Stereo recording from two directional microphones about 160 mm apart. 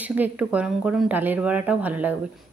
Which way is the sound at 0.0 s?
10° right (ahead or behind).